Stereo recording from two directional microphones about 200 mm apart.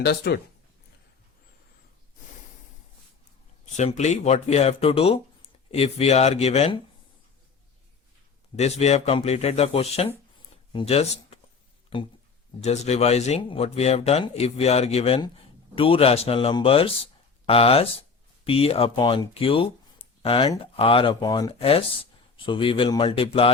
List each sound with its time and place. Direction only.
0.0 s speech: 55° left (ahead or behind)
3.8 s speech: 35° left (ahead or behind)
8.5 s speech: 35° left (ahead or behind)